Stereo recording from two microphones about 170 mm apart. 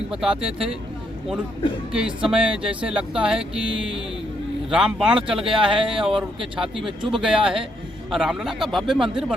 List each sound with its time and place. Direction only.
0.1 s speech: 5° right (ahead or behind)
1.9 s speech: 5° right (ahead or behind)